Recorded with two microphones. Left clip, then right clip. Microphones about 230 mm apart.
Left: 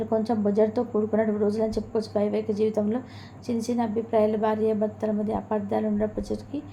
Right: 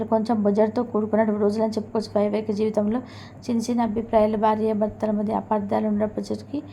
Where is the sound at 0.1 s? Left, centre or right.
Right.